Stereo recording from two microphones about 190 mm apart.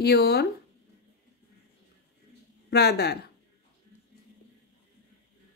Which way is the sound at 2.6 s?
60° left (ahead or behind).